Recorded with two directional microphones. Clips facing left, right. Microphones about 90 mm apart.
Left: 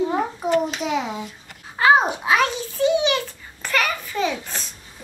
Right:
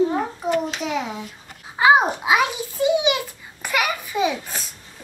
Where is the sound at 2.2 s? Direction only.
10° right (ahead or behind).